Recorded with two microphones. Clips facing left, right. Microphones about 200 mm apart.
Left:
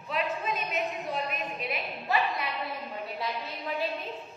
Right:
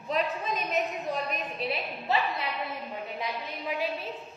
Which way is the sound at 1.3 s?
35° right (ahead or behind).